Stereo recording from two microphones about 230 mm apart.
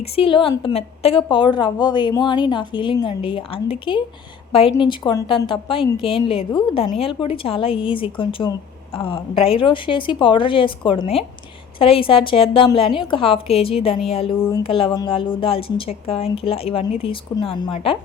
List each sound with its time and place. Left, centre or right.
0.0 s a woman's voice: left
14.3 s speech: centre
14.6 s a woman's voice: left